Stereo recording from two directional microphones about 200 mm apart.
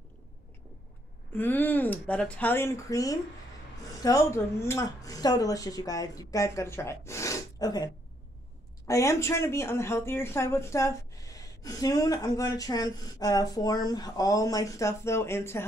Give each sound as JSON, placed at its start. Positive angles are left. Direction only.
{"t": 1.3, "sound": "speech", "side_deg": 10}